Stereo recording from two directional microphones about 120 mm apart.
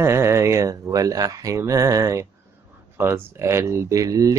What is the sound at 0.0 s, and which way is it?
Speech, 20° right (ahead or behind).